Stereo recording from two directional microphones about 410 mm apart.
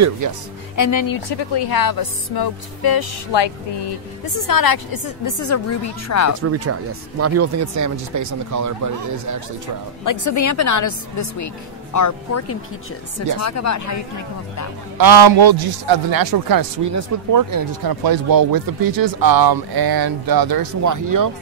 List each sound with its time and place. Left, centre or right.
0.7 s speech: left
4.4 s a woman's voice: left
6.4 s speech: right
10.0 s a woman's voice: left
15.0 s speech: right